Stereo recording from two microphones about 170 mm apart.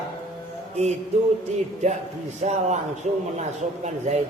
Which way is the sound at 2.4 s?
45° right (ahead or behind).